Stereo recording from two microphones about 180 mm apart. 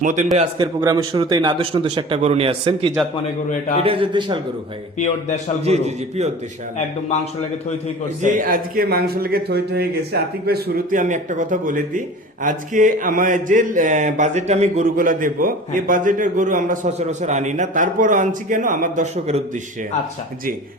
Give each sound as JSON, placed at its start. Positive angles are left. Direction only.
{"t": 0.0, "sound": "a man's voice", "side_deg": -45}
{"t": 0.8, "sound": "speech", "side_deg": -20}
{"t": 4.9, "sound": "a man's voice", "side_deg": 40}
{"t": 5.6, "sound": "a man's voice", "side_deg": -35}
{"t": 8.2, "sound": "speech", "side_deg": -45}
{"t": 11.0, "sound": "a man's voice", "side_deg": -45}